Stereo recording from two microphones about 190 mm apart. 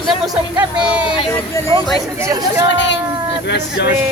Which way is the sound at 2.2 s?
15° right (ahead or behind).